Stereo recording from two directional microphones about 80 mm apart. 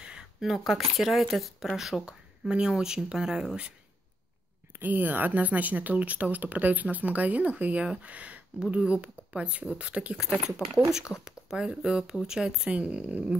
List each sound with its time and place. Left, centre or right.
0.0 s speech: centre
4.7 s speech: right
10.1 s speech: centre